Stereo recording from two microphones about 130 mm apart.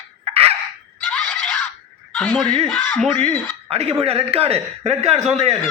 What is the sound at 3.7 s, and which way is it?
A man's voice, 50° right (ahead or behind).